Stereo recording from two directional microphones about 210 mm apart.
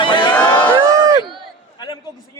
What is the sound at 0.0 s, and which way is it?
Crowd, 25° left (ahead or behind).